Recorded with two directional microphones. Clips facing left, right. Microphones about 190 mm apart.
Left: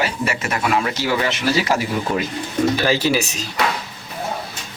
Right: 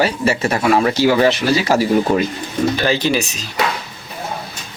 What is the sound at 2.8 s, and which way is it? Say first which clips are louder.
Speech: right 1 dB; 5° left (ahead or behind).